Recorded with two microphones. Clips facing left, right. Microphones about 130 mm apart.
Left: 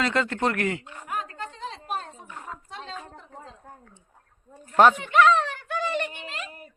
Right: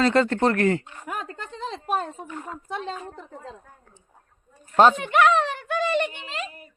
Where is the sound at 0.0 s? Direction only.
35° right (ahead or behind).